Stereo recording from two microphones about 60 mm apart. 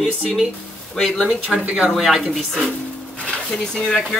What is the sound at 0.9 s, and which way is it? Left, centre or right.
Speech, centre.